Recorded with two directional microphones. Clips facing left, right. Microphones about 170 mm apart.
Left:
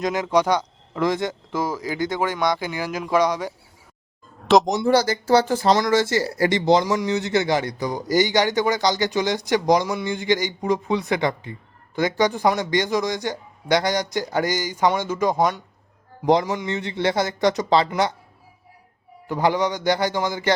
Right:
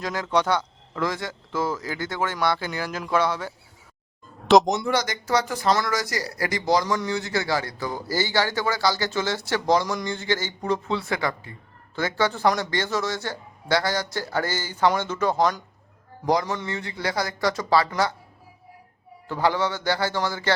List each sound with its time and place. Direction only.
0.0 s speech: 15° left (ahead or behind)
4.4 s speech: centre (ahead or behind)
4.9 s speech: 30° left (ahead or behind)
19.3 s speech: 15° left (ahead or behind)